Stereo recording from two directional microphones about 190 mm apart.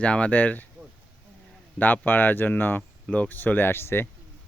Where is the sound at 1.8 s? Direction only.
10° left (ahead or behind).